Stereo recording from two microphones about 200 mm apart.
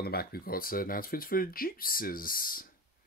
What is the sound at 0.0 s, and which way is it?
Speech, 50° left (ahead or behind).